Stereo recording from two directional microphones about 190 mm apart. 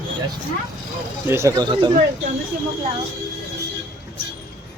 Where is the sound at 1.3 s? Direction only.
15° right (ahead or behind).